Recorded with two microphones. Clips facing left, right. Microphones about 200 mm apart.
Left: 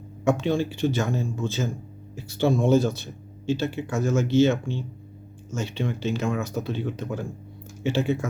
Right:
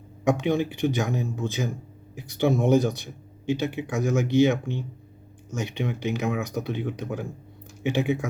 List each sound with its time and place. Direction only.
0.3 s speech: 15° right (ahead or behind)